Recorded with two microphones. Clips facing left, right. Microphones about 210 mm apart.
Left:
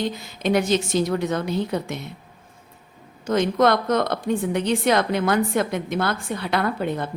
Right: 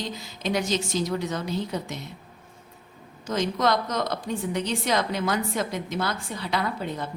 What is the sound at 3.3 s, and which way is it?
Speech, 55° left (ahead or behind).